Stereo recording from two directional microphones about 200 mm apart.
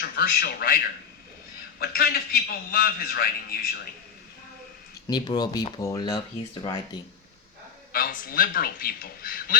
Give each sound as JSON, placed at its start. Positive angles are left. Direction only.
{"t": 0.0, "sound": "speech", "side_deg": 45}
{"t": 1.8, "sound": "a man's voice", "side_deg": 50}
{"t": 5.0, "sound": "speech", "side_deg": 20}
{"t": 7.9, "sound": "a man's voice", "side_deg": 45}